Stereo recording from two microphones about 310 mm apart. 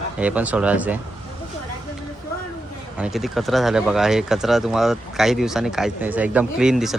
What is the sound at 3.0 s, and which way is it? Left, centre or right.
Speech, centre.